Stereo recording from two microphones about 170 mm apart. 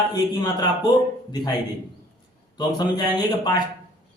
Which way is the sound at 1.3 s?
25° left (ahead or behind).